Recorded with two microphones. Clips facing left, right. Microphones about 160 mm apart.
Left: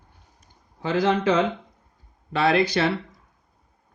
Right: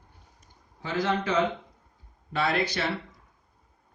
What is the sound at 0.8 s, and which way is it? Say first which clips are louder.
Speech: left 6 dB; 90° left.